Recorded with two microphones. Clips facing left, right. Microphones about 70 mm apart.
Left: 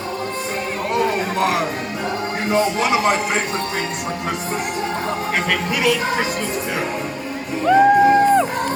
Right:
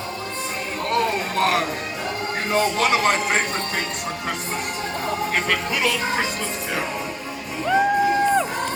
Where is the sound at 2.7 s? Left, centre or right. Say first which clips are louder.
Left 2 dB; right.